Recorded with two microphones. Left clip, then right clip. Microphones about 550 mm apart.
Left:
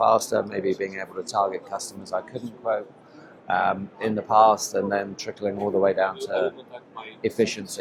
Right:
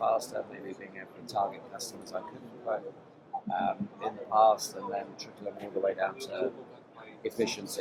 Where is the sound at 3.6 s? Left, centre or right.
Left.